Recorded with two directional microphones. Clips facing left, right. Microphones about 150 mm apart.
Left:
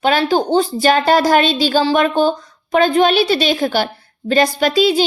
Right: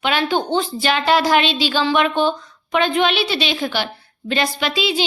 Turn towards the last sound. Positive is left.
turn(degrees=45)  # may be behind; listen again after turning